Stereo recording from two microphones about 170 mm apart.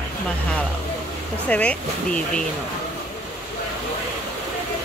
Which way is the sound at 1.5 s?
5° left (ahead or behind).